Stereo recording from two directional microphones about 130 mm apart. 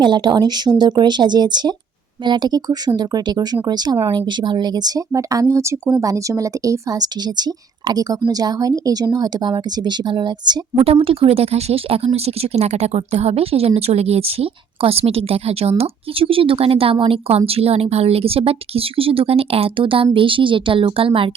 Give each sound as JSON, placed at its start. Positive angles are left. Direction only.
{"t": 0.0, "sound": "speech", "side_deg": -35}
{"t": 10.8, "sound": "speech", "side_deg": -45}